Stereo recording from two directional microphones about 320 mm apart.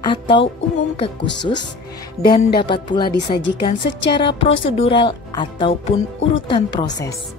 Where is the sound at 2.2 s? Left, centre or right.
Centre.